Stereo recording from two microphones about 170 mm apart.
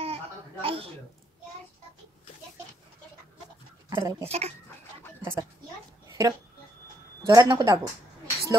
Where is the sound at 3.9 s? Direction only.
15° right (ahead or behind).